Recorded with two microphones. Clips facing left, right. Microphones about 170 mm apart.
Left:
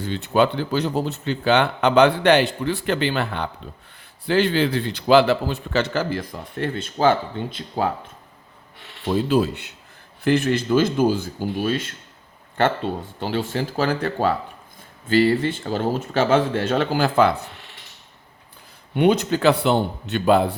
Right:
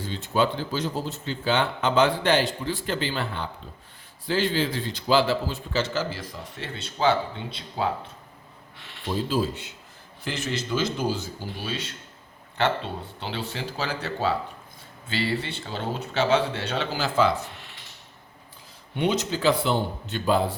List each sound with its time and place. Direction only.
0.0 s a man's voice: 65° left (ahead or behind); by 7.9 s 45° left (ahead or behind)
9.0 s a man's voice: 65° left (ahead or behind)
10.2 s speech: 55° left (ahead or behind)
18.9 s a man's voice: 55° left (ahead or behind)